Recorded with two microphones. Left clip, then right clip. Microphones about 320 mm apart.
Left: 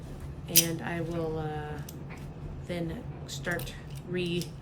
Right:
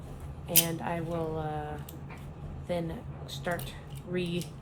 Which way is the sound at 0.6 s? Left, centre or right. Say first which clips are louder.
Even; centre.